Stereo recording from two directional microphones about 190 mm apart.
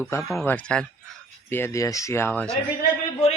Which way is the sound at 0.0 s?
15° left (ahead or behind).